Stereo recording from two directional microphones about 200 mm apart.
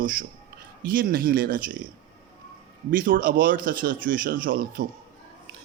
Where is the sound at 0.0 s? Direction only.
45° right (ahead or behind).